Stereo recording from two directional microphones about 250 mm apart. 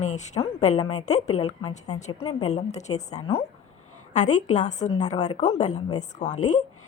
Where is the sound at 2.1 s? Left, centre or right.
Left.